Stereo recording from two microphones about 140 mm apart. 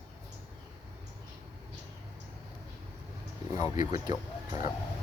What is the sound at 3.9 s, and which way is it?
Speech, 30° right (ahead or behind).